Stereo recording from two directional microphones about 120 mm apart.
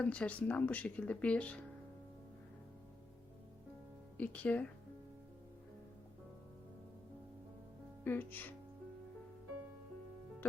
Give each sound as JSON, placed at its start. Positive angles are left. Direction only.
{"t": 0.0, "sound": "speech", "side_deg": 10}
{"t": 4.2, "sound": "speech", "side_deg": 10}
{"t": 8.0, "sound": "speech", "side_deg": 15}